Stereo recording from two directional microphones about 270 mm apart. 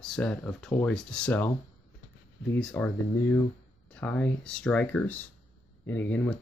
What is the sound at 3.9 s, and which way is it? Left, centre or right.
Speech, centre.